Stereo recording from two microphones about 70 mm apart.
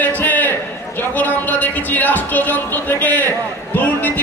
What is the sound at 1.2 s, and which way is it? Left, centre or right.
Music, left.